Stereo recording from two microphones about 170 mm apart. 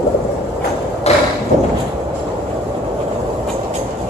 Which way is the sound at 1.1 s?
40° left (ahead or behind).